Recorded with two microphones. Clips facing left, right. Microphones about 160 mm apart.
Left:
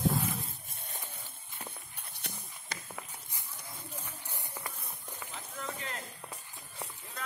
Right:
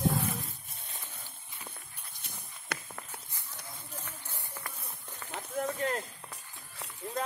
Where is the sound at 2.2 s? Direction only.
70° left (ahead or behind).